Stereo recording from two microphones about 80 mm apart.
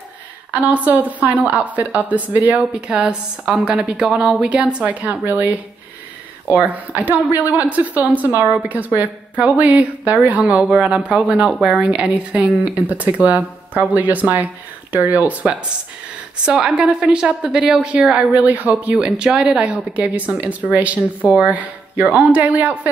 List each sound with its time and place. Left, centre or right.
0.5 s a woman's voice: centre
16.4 s a woman's voice: centre